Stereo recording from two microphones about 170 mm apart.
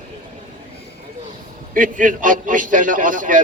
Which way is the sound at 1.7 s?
50° right (ahead or behind).